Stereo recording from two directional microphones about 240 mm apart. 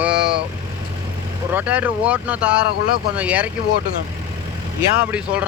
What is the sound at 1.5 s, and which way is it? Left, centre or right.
Speech, centre.